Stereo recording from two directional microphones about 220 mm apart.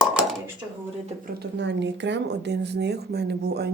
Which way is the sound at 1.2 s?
50° right (ahead or behind).